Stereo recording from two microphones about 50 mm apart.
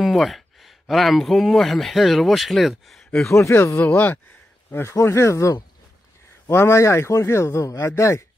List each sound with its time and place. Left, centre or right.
0.0 s a sound: centre
0.8 s speech: centre
3.3 s speech: left
3.5 s speech: left
3.8 s speech: left
4.6 s speech: left
4.9 s speech: left
6.4 s a man's voice: left